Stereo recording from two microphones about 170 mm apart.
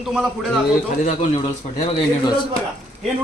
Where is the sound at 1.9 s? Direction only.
30° left (ahead or behind).